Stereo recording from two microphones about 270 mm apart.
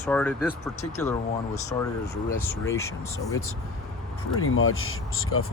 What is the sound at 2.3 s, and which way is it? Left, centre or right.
Speech, centre.